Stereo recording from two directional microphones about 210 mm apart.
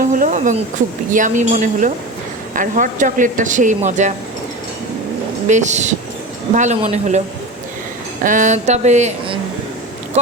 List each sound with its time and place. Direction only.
0.1 s speech: 35° right (ahead or behind)
5.5 s speech: 35° right (ahead or behind)
8.2 s speech: 40° right (ahead or behind)